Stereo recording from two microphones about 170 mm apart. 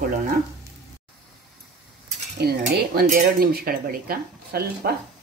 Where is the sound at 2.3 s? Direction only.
65° right (ahead or behind).